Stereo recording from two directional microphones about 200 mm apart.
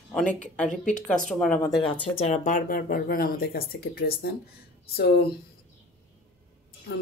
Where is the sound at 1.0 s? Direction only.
5° left (ahead or behind).